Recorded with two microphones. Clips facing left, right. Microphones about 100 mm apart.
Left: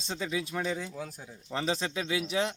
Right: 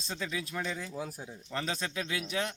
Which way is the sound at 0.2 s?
10° left (ahead or behind).